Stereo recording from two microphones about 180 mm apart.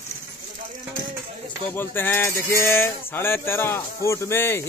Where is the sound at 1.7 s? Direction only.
10° left (ahead or behind).